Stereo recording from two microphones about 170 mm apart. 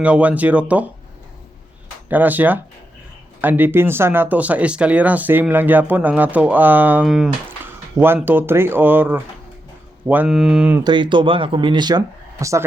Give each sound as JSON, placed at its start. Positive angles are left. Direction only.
{"t": 0.0, "sound": "speech", "side_deg": -10}
{"t": 2.0, "sound": "speech", "side_deg": -10}
{"t": 10.8, "sound": "speech", "side_deg": -30}